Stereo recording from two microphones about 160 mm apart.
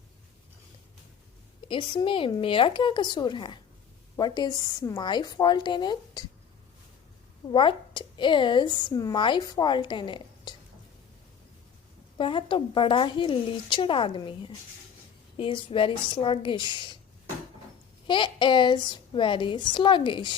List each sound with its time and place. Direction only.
1.6 s a woman's voice: 30° left (ahead or behind)
7.5 s a woman's voice: 30° left (ahead or behind)
12.1 s speech: 30° left (ahead or behind)
18.1 s speech: 30° left (ahead or behind)